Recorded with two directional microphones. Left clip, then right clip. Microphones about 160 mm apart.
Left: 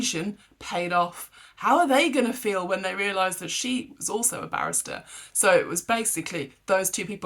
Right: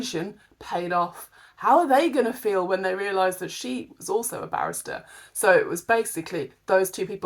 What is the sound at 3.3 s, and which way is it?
Speech, 10° left (ahead or behind).